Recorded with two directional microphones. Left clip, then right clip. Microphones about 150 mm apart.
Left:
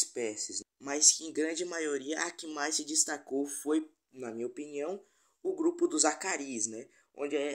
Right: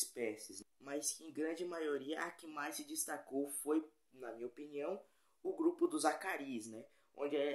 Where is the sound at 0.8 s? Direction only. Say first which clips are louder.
Left 15 dB; 60° left (ahead or behind).